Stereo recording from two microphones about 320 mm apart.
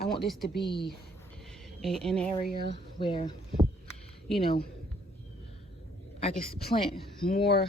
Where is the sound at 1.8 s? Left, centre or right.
Centre.